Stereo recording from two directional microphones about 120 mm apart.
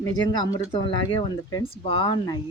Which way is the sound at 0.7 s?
45° left (ahead or behind).